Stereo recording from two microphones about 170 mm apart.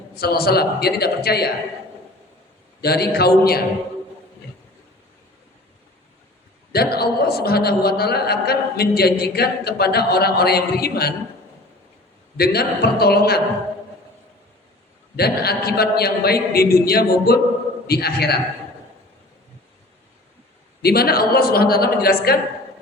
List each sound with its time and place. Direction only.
0.2 s a man's voice: 65° left (ahead or behind)
2.8 s a man's voice: 70° left (ahead or behind)
6.7 s a man's voice: 65° left (ahead or behind)
12.4 s a man's voice: 65° left (ahead or behind)
15.1 s a man's voice: 65° left (ahead or behind)
20.8 s a man's voice: 65° left (ahead or behind)